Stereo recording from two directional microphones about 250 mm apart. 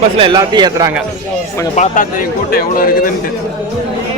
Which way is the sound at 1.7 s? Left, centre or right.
Left.